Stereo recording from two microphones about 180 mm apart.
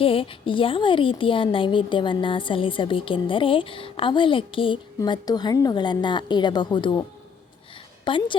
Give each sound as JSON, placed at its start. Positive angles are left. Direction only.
{"t": 0.0, "sound": "a woman's voice", "side_deg": 30}
{"t": 8.0, "sound": "a woman's voice", "side_deg": 30}